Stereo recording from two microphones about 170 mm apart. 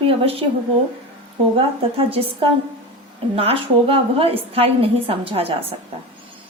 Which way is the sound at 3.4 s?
35° right (ahead or behind).